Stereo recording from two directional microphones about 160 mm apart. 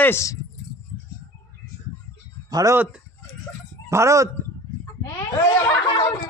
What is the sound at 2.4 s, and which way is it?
Speech, 20° right (ahead or behind).